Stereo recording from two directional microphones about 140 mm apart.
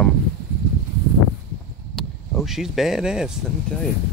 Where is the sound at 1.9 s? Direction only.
Centre (ahead or behind).